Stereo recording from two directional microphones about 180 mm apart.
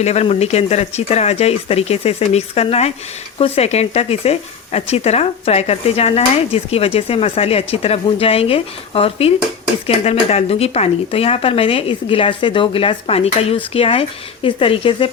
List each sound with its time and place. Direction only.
0.0 s speech: 35° left (ahead or behind)